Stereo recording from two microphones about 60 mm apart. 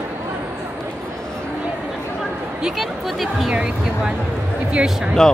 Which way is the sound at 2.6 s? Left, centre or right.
Centre.